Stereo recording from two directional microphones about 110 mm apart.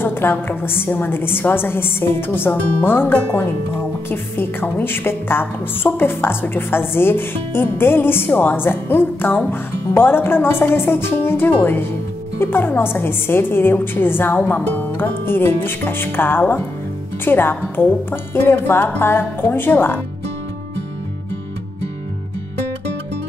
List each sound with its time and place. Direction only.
0.0 s a woman's voice: 20° left (ahead or behind)